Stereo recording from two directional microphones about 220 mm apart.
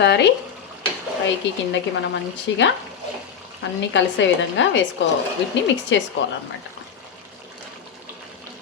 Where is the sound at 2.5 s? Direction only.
55° left (ahead or behind).